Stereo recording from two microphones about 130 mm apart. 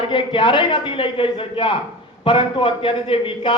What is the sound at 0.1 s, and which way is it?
A man's voice, 40° left (ahead or behind).